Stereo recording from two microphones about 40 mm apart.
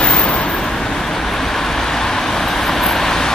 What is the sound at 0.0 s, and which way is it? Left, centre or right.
Vehicle, left.